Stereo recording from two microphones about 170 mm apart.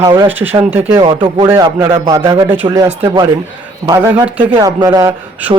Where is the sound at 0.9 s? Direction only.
30° right (ahead or behind).